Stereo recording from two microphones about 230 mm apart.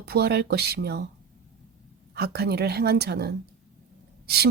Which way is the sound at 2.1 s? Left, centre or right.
Right.